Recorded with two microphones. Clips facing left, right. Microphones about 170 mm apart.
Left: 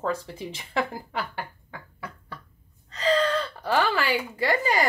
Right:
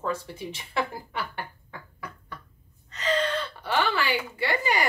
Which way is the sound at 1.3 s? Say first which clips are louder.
Left 1 dB; 30° left (ahead or behind).